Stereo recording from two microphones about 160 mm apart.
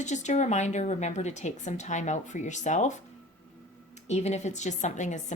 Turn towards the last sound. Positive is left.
turn(degrees=50)  # may be behind; listen again after turning